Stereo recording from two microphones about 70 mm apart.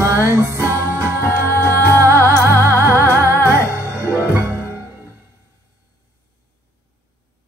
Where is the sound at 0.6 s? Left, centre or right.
Left.